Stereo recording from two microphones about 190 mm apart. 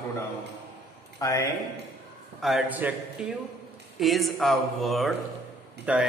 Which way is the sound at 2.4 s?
Centre (ahead or behind).